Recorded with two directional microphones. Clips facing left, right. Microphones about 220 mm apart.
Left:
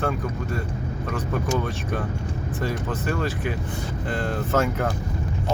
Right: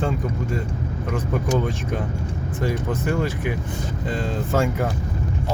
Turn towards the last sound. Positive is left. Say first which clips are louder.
# right 1 dB
turn(degrees=-15)  # may be behind; listen again after turning